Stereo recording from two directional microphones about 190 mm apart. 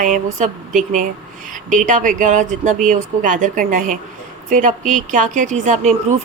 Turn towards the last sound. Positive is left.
turn(degrees=-40)  # may be behind; listen again after turning